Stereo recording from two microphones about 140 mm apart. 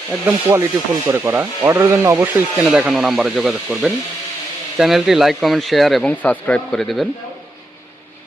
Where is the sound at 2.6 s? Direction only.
5° right (ahead or behind).